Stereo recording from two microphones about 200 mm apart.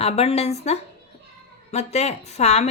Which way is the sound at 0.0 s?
30° left (ahead or behind).